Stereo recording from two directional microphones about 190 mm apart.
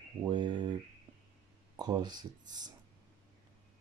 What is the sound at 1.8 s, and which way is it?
Speech, 20° right (ahead or behind).